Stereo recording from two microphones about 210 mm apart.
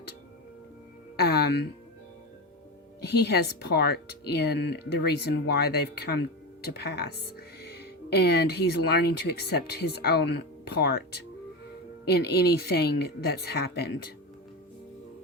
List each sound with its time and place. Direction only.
1.1 s music: 50° left (ahead or behind)
3.0 s speech: 50° left (ahead or behind)